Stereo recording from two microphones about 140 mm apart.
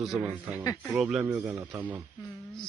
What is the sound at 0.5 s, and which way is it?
Speech, 25° left (ahead or behind).